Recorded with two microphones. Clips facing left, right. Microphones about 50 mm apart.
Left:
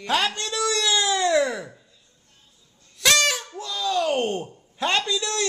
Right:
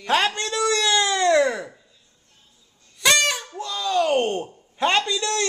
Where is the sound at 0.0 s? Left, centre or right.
Centre.